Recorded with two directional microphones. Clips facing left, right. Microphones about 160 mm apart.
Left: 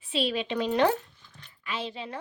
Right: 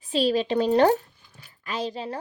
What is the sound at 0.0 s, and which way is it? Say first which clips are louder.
Speech: right 6 dB; 40° right (ahead or behind).